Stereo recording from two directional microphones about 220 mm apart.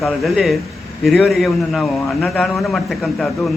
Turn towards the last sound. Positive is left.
turn(degrees=0)  # may be behind; listen again after turning